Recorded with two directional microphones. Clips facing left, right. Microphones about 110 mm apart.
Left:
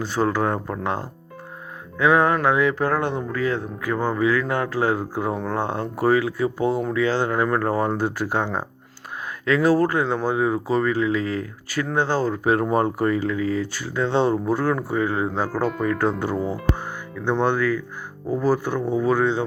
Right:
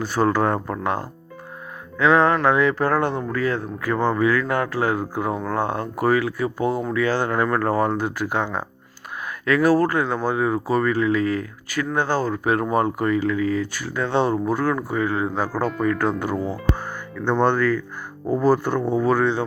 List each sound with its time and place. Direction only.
0.0 s speech: 20° left (ahead or behind)
2.0 s speech: 15° left (ahead or behind)
16.7 s music: 15° left (ahead or behind)
17.4 s speech: 10° left (ahead or behind)